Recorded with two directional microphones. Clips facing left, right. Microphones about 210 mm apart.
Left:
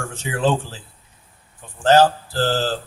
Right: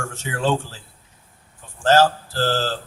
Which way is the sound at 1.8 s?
15° left (ahead or behind).